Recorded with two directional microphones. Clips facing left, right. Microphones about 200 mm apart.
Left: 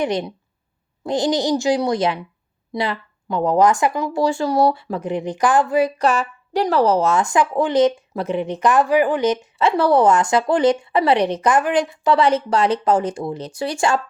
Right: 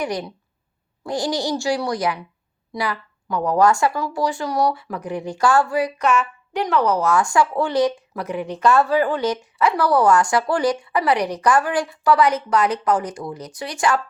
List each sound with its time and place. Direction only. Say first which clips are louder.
0.0 s speech: left 4 dB; 25° left (ahead or behind)